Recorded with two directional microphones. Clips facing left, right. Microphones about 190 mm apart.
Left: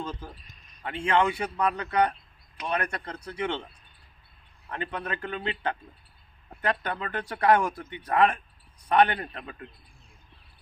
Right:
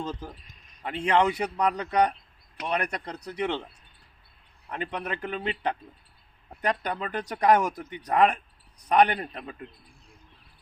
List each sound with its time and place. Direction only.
0.0 s speech: 20° right (ahead or behind)
4.7 s speech: 15° right (ahead or behind)